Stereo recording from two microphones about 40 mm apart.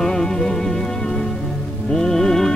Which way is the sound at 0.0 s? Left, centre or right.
Centre.